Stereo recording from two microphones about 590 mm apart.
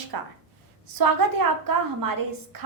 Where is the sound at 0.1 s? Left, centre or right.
Right.